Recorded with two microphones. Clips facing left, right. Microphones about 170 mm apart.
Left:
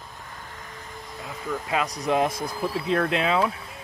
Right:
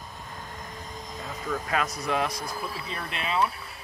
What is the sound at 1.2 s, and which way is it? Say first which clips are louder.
Speech: left 1 dB; 15° left (ahead or behind).